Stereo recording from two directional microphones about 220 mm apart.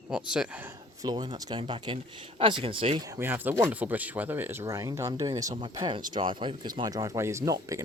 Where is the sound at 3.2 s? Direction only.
10° right (ahead or behind).